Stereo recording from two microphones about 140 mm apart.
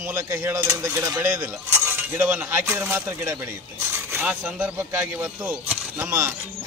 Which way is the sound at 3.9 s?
10° right (ahead or behind).